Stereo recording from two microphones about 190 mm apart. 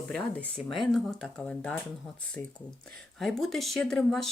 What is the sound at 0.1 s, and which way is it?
Speech, 5° left (ahead or behind).